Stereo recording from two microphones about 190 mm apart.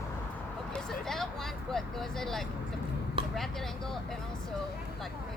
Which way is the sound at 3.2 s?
25° right (ahead or behind).